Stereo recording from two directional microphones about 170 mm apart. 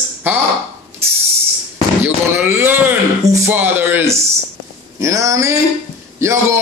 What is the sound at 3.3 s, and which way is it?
Music, 10° right (ahead or behind).